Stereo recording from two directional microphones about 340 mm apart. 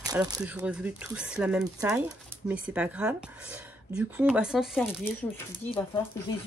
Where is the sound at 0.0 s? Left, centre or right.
Centre.